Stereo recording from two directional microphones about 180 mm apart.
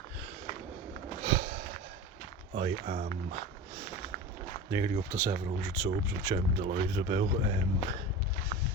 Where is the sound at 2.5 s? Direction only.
30° right (ahead or behind).